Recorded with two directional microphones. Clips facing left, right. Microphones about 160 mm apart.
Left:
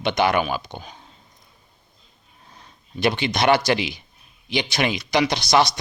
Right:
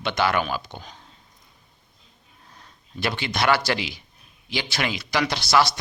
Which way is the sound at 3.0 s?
20° left (ahead or behind).